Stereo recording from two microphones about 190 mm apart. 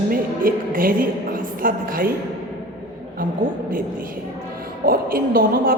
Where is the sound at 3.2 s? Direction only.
50° right (ahead or behind).